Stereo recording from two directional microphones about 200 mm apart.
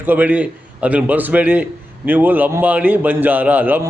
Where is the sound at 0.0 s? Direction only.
10° right (ahead or behind).